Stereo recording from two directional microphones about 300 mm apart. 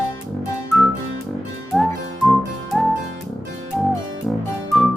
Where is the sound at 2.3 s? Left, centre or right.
Centre.